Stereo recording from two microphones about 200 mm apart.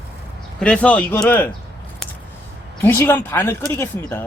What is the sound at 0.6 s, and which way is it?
Speech, 5° left (ahead or behind).